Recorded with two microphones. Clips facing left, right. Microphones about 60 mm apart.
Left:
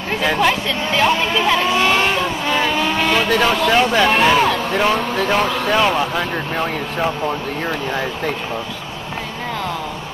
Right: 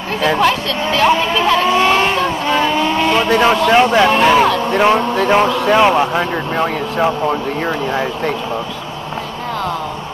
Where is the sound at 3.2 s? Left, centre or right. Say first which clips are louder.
Right 5 dB; right.